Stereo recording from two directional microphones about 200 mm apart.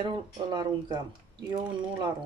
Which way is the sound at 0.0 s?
20° right (ahead or behind).